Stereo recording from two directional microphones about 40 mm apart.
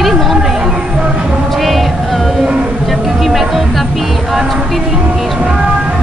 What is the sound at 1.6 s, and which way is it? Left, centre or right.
Music, centre.